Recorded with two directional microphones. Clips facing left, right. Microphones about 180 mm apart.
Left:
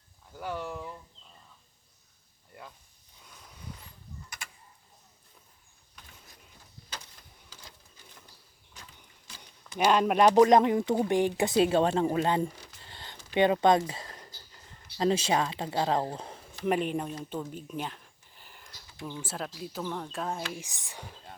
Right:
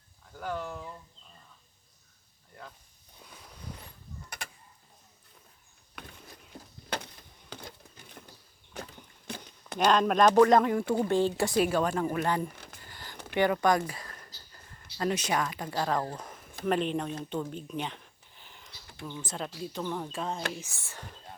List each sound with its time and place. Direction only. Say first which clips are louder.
0.3 s speech: even; 5° left (ahead or behind)
6.0 s a sound: right 7 dB; 65° right (ahead or behind)
9.7 s speech: even; 10° left (ahead or behind)
12.8 s a sound: left 1 dB; 25° left (ahead or behind)
13.3 s speech: left 2 dB; 20° left (ahead or behind)
16.6 s speech: even; 10° left (ahead or behind)
18.3 s a sound: even; 5° left (ahead or behind)
19.1 s speech: right 1 dB; 10° left (ahead or behind)
20.6 s speech: even; 15° left (ahead or behind)